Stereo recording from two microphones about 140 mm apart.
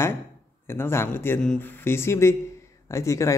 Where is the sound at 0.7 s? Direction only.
15° left (ahead or behind).